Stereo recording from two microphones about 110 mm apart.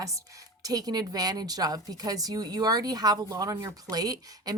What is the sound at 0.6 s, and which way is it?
Speech, 35° right (ahead or behind).